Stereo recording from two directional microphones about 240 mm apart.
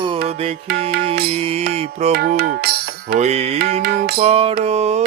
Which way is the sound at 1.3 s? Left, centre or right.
Right.